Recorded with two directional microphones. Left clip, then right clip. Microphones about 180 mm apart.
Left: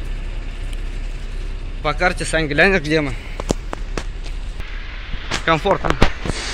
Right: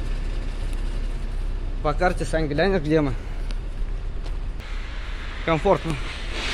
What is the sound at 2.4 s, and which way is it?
Speech, 15° left (ahead or behind).